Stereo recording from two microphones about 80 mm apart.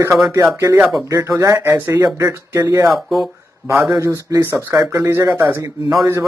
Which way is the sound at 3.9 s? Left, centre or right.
Right.